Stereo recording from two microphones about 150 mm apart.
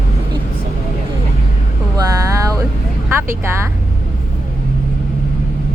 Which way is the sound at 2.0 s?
25° right (ahead or behind).